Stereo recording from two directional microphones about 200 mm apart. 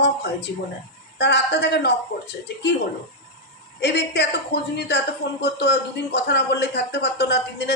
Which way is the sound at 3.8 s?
60° left (ahead or behind).